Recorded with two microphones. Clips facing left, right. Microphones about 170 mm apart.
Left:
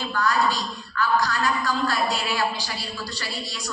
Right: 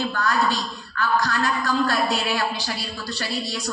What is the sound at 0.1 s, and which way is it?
A woman's voice, 50° right (ahead or behind).